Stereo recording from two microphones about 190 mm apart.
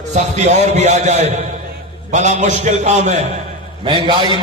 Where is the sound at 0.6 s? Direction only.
35° right (ahead or behind).